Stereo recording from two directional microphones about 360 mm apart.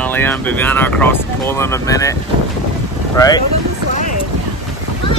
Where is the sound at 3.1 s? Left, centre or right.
Centre.